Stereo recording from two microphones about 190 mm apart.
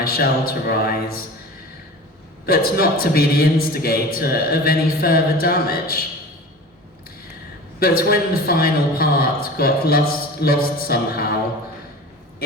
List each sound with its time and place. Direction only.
0.0 s a man's voice: 55° left (ahead or behind)
2.5 s a man's voice: 55° left (ahead or behind)
7.8 s a man's voice: 50° left (ahead or behind)